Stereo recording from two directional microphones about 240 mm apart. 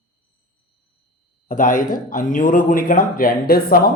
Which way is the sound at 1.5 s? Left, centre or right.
Left.